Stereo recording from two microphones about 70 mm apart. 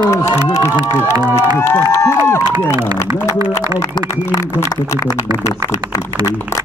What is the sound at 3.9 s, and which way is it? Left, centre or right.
Speech, left.